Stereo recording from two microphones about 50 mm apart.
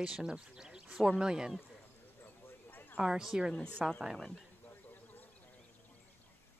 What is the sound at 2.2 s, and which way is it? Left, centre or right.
Horse, left.